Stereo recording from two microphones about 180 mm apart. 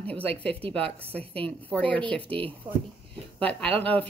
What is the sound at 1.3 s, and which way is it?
Speech, 5° left (ahead or behind).